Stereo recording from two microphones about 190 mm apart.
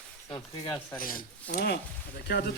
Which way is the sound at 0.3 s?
25° left (ahead or behind).